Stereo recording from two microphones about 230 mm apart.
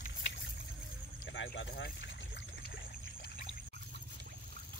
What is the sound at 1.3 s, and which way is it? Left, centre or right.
Speech, left.